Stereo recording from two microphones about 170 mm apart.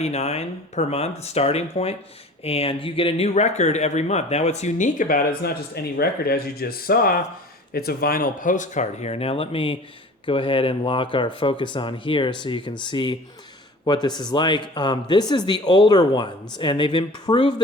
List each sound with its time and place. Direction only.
0.0 s speech: 40° left (ahead or behind)